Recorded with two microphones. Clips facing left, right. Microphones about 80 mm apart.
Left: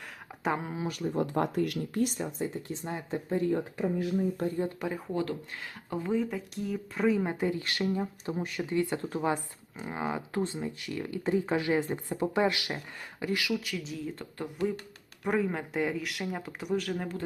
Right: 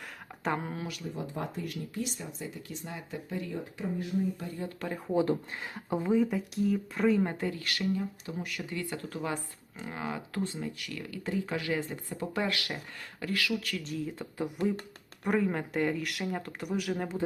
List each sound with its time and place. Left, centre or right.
0.4 s speech: centre
0.9 s speech: left
2.0 s speech: left
2.6 s speech: left
4.8 s speech: centre
5.1 s speech: right
6.3 s speech: centre
7.3 s speech: left; by 17.1 s centre